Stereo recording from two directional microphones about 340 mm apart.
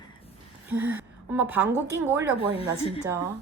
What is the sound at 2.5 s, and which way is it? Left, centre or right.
Speech, centre.